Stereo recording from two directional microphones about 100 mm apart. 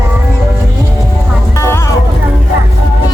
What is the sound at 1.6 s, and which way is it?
Music, 25° left (ahead or behind).